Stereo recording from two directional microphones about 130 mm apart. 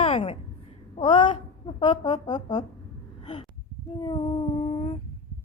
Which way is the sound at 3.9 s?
40° left (ahead or behind).